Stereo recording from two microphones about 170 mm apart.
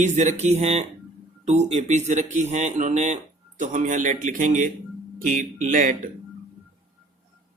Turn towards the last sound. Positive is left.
turn(degrees=-55)  # may be behind; listen again after turning